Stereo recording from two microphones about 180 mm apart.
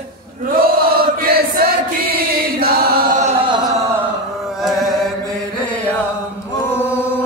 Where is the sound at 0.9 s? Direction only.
55° right (ahead or behind).